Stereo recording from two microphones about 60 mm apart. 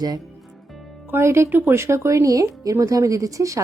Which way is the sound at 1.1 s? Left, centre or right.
Right.